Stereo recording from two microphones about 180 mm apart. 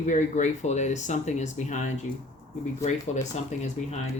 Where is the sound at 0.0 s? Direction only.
40° left (ahead or behind).